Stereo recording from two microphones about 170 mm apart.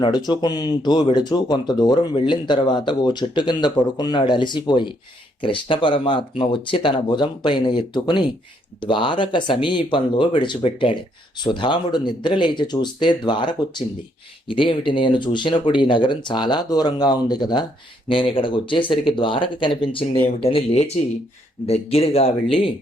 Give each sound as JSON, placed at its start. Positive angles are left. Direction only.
{"t": 0.3, "sound": "speech", "side_deg": 25}